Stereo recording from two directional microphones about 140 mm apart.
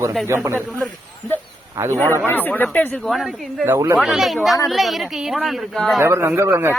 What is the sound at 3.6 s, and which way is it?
Speech, 20° right (ahead or behind).